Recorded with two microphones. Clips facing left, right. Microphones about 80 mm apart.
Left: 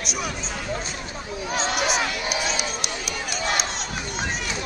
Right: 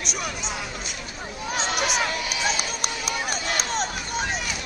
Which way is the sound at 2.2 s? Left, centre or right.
Left.